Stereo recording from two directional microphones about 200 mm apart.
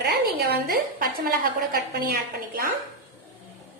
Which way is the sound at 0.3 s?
50° right (ahead or behind).